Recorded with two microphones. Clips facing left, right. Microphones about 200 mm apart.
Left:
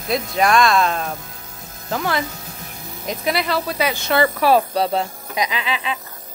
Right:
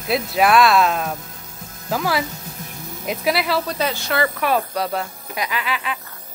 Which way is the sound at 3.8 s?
15° left (ahead or behind).